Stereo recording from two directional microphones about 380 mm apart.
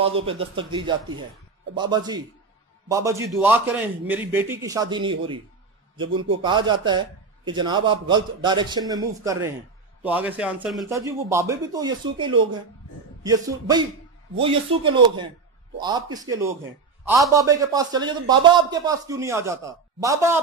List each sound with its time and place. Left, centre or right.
0.0 s a man's voice: centre